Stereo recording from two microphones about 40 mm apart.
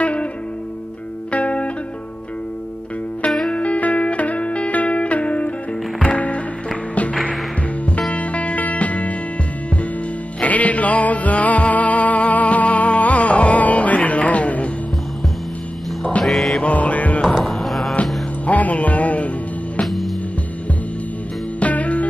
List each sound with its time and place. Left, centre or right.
0.0 s music: left
1.3 s music: left
3.3 s music: centre
3.5 s music: left
8.1 s music: left
10.4 s music: left
16.3 s music: centre
16.5 s music: left
17.6 s music: centre
18.5 s music: left
21.5 s music: left